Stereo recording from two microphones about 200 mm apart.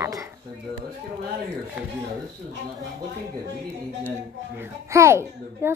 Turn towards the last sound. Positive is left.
turn(degrees=-15)  # may be behind; listen again after turning